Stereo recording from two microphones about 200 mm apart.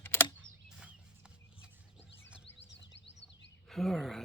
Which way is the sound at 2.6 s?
60° left (ahead or behind).